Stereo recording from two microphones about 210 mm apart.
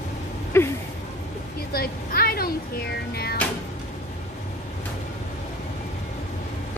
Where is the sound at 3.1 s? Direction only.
50° left (ahead or behind).